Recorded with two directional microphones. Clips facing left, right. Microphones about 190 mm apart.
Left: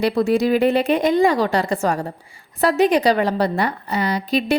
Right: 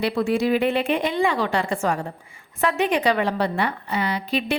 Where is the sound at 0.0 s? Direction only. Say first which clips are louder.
Left 4 dB; 40° left (ahead or behind).